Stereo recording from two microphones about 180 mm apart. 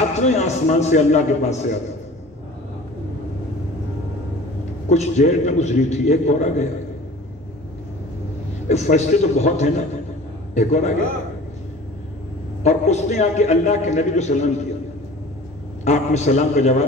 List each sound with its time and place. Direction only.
0.1 s a man's voice: 40° left (ahead or behind)
4.8 s a man's voice: 40° left (ahead or behind)
8.6 s a man's voice: 40° left (ahead or behind)
12.6 s a man's voice: 40° left (ahead or behind)
15.8 s a man's voice: 40° left (ahead or behind)